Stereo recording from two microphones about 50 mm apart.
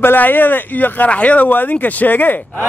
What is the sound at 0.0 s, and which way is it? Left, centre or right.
Speech, left.